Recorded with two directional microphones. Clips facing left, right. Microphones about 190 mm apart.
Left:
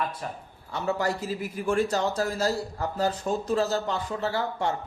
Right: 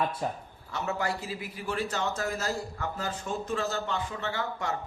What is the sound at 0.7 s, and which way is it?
A man's voice, 35° left (ahead or behind).